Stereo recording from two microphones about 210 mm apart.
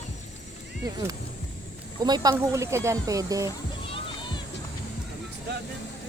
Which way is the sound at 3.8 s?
25° left (ahead or behind).